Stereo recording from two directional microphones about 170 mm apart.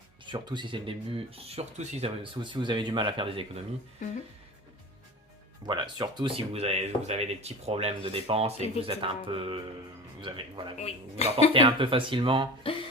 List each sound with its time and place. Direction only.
0.3 s speech: 25° right (ahead or behind)
4.0 s speech: 50° left (ahead or behind)
5.6 s speech: 25° right (ahead or behind)
10.8 s speech: 40° left (ahead or behind)
11.5 s speech: 30° right (ahead or behind)